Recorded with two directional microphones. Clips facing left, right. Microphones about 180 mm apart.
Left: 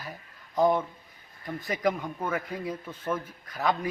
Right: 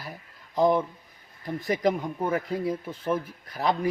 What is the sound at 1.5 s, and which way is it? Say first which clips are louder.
Speech: right 3 dB; 35° right (ahead or behind).